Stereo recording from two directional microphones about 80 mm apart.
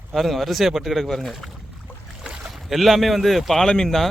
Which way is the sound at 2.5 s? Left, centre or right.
Centre.